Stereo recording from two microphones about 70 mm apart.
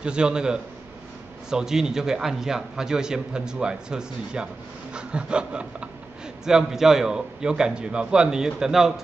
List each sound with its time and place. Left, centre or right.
0.0 s a man's voice: centre